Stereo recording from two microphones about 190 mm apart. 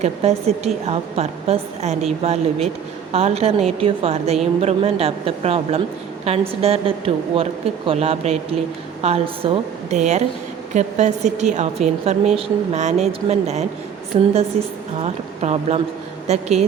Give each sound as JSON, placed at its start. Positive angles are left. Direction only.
{"t": 0.0, "sound": "a woman's voice", "side_deg": -35}